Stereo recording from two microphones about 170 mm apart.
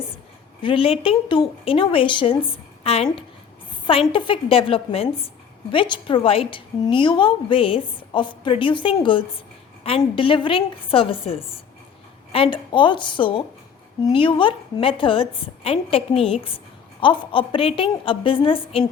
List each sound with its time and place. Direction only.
0.6 s a woman's voice: 30° left (ahead or behind)